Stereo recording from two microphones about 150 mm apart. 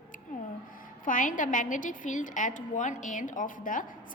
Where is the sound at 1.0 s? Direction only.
60° left (ahead or behind).